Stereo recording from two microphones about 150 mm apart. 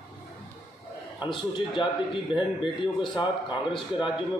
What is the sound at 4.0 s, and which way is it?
Speech, 30° left (ahead or behind).